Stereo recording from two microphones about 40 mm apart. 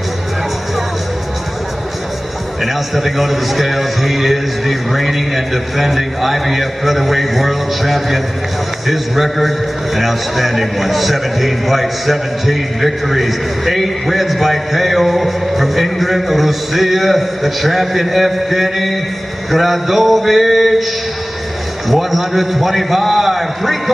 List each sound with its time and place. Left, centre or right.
2.6 s a man's voice: centre
21.8 s a man's voice: centre